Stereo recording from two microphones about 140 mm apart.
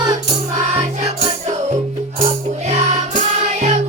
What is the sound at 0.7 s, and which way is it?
Music, 55° right (ahead or behind).